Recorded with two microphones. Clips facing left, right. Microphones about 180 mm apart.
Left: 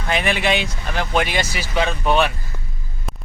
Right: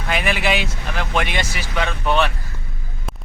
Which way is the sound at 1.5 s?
30° left (ahead or behind).